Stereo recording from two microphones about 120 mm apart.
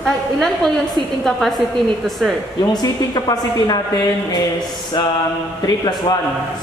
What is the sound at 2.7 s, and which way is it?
A woman's voice, 35° left (ahead or behind).